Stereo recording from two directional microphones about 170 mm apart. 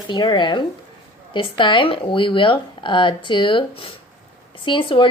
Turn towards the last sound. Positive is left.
turn(degrees=30)  # may be behind; listen again after turning